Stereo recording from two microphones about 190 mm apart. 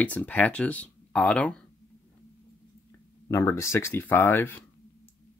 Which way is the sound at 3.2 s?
15° left (ahead or behind).